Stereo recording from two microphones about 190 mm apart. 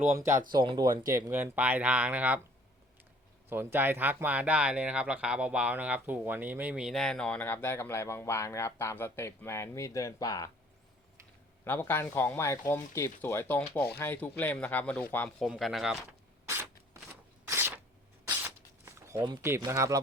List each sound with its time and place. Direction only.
0.0 s speech: 15° right (ahead or behind)
0.5 s speech: 25° right (ahead or behind); by 2.4 s 10° right (ahead or behind)
3.5 s speech: 10° right (ahead or behind); by 10.5 s 20° left (ahead or behind)
11.6 s speech: 10° left (ahead or behind)
16.5 s scissors: 15° right (ahead or behind)
18.3 s zipper: 10° right (ahead or behind)